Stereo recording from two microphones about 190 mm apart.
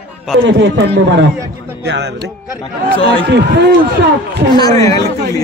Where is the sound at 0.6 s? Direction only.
70° right (ahead or behind).